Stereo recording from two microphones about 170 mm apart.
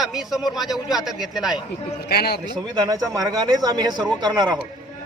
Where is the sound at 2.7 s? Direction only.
25° right (ahead or behind).